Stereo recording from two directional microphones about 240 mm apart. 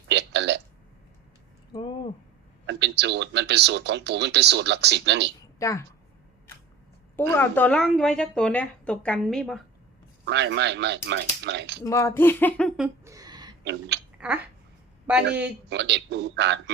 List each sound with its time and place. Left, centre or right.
0.1 s a sound: right
2.6 s speech: right
5.5 s a woman's voice: centre
7.2 s speech: centre
10.2 s speech: right
11.8 s speech: centre
13.1 s a sound: centre
13.7 s speech: right
14.2 s speech: centre
15.7 s speech: right